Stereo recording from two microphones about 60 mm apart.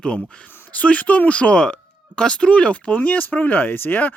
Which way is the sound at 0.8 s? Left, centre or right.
Left.